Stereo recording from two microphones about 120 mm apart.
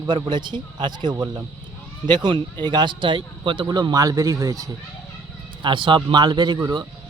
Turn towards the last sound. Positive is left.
turn(degrees=-35)  # may be behind; listen again after turning